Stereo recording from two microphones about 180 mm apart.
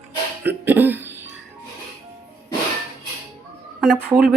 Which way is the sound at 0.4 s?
10° right (ahead or behind).